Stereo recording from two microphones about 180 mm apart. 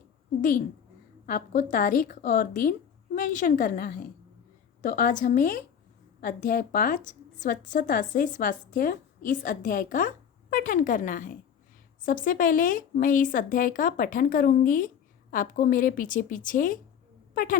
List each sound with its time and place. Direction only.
1.3 s a woman's voice: 50° left (ahead or behind)